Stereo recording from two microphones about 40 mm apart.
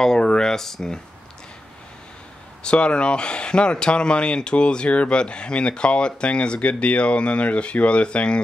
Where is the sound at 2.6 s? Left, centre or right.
Left.